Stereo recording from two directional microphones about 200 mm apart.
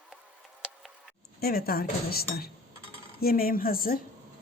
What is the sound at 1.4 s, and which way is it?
A woman's voice, 50° left (ahead or behind).